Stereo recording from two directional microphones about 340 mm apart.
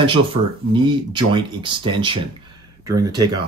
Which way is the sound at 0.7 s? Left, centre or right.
Centre.